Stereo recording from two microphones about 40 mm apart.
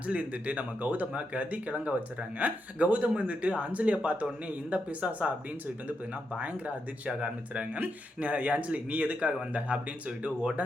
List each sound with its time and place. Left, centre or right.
0.1 s speech: right
7.1 s speech: right
7.6 s speech: right